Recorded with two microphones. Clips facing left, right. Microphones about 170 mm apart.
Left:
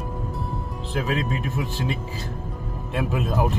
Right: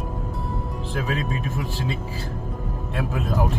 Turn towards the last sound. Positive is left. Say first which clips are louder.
# left 1 dB
turn(degrees=20)  # may be behind; listen again after turning